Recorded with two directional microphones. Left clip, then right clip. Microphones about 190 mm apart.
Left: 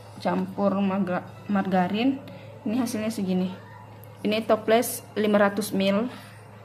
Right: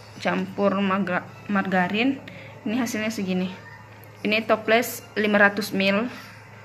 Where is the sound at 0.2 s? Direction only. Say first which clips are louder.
Right 2 dB; 5° left (ahead or behind).